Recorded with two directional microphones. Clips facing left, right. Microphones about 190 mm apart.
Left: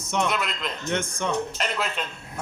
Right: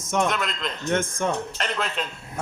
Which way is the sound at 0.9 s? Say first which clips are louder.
Right 4 dB; 50° right (ahead or behind).